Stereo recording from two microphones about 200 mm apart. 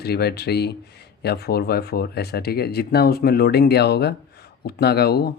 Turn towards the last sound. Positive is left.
turn(degrees=50)  # may be behind; listen again after turning